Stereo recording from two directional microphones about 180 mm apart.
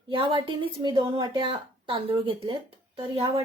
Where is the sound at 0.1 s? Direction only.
30° right (ahead or behind).